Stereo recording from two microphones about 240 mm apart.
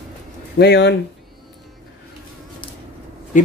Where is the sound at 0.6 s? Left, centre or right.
Left.